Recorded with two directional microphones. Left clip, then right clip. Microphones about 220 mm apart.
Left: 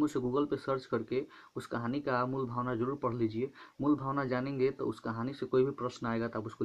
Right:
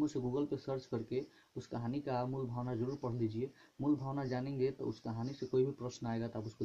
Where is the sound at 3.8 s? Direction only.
25° left (ahead or behind).